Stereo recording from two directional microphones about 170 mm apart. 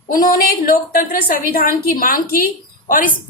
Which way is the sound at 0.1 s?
55° left (ahead or behind).